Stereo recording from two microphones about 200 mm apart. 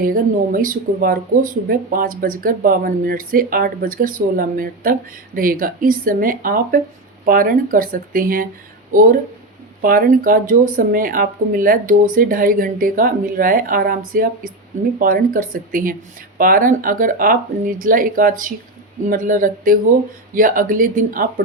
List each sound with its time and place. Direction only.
0.0 s speech: 45° right (ahead or behind)